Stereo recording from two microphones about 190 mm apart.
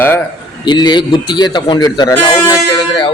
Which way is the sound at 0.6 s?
25° left (ahead or behind).